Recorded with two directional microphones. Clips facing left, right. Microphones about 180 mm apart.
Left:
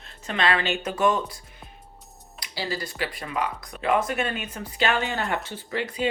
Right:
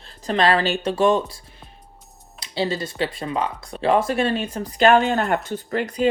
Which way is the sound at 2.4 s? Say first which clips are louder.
Right 7 dB; 25° right (ahead or behind).